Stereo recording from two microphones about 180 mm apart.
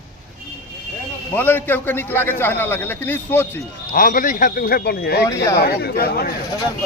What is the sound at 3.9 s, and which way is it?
A man's voice, 50° left (ahead or behind).